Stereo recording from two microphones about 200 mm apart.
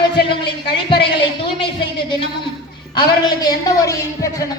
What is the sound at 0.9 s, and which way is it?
Speech, 25° left (ahead or behind).